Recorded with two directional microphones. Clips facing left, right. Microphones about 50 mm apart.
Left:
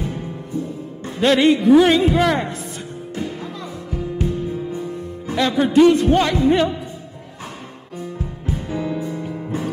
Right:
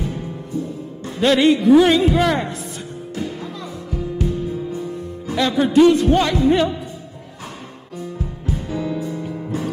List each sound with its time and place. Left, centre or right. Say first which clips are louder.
1.0 s a man's voice: even; left
3.2 s music: even; left
5.3 s a man's voice: even; left
8.5 s music: even; left